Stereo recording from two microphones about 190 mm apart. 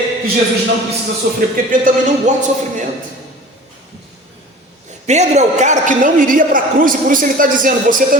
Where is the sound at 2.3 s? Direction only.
40° right (ahead or behind).